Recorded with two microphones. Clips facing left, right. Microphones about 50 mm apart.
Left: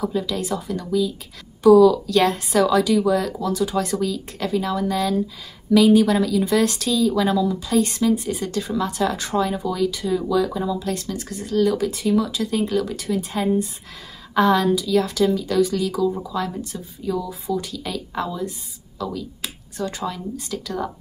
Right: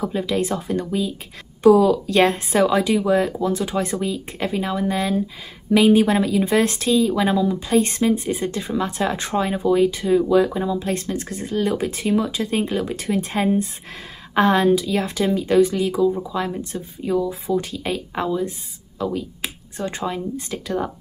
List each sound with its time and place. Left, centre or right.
0.0 s speech: right